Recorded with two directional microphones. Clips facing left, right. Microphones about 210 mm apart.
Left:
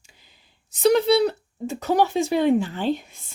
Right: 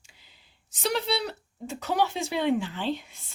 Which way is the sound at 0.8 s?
50° left (ahead or behind).